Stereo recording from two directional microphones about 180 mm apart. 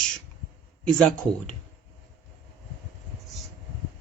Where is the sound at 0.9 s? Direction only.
5° left (ahead or behind).